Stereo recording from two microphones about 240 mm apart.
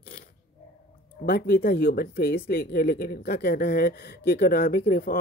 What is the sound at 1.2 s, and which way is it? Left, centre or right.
Speech, left.